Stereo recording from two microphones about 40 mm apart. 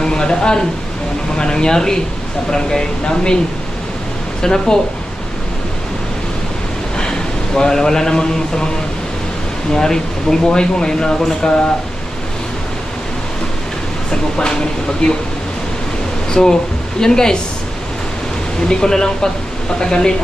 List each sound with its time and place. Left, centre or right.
0.0 s speech: left
4.4 s speech: centre
7.0 s a man's voice: centre
9.7 s speech: centre
14.3 s speech: centre
16.3 s speech: centre
18.7 s speech: centre